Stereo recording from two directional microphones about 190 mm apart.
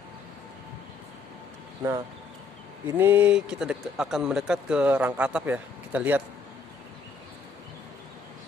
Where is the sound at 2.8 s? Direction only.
10° right (ahead or behind).